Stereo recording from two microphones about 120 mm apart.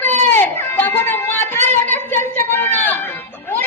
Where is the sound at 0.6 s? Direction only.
15° left (ahead or behind).